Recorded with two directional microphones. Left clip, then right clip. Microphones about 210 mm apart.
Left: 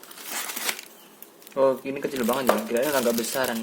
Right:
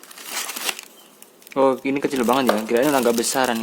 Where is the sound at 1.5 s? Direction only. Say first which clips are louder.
Right 4 dB; 45° right (ahead or behind).